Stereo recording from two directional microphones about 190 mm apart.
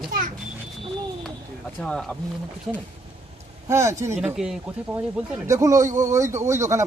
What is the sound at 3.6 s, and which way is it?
Speech, 15° right (ahead or behind).